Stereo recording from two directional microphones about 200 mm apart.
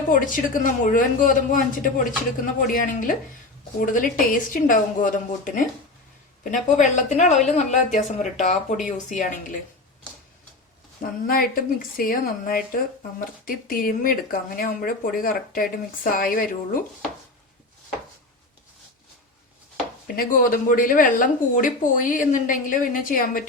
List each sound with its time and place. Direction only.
0.1 s speech: 40° left (ahead or behind)
11.0 s speech: 45° left (ahead or behind)
20.1 s speech: 45° left (ahead or behind)